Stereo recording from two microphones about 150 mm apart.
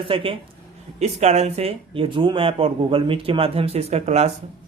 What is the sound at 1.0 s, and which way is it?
Speech, 50° right (ahead or behind).